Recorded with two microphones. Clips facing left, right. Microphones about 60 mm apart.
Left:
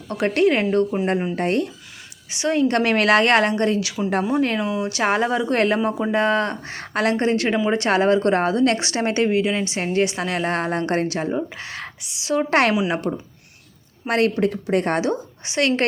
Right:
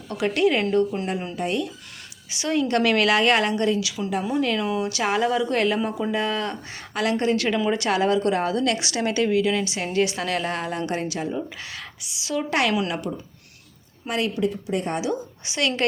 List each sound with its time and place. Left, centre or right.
0.1 s speech: left
0.9 s speech: left
1.4 s speech: left
2.3 s speech: left
10.5 s speech: left
14.1 s speech: left
15.0 s speech: left